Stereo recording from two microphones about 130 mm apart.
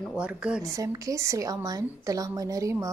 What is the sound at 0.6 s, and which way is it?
A woman's voice, 25° right (ahead or behind).